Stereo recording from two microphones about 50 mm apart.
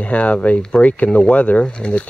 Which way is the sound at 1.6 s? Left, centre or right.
Centre.